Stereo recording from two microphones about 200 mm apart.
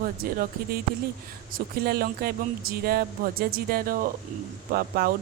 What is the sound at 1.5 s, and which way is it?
Speech, 45° right (ahead or behind).